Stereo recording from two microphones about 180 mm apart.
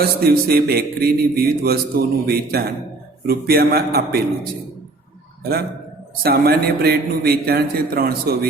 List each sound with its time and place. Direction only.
0.0 s a man's voice: 60° right (ahead or behind)
5.4 s a man's voice: 60° right (ahead or behind)